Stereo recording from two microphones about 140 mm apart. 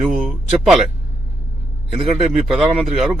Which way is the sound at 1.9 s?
Centre (ahead or behind).